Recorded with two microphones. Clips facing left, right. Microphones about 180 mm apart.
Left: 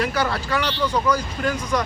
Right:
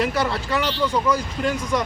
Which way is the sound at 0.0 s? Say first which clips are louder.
Right 1 dB; 25° right (ahead or behind).